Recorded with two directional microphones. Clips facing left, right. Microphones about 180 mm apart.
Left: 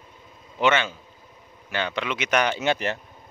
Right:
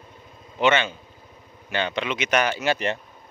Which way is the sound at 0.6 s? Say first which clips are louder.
Right 1 dB; 15° right (ahead or behind).